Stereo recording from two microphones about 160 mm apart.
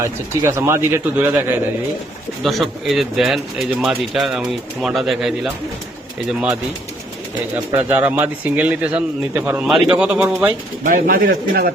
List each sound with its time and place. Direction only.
0.0 s speech: 15° right (ahead or behind)
2.4 s speech: centre (ahead or behind)
7.5 s speech: 10° right (ahead or behind)
10.8 s a man's voice: 60° right (ahead or behind)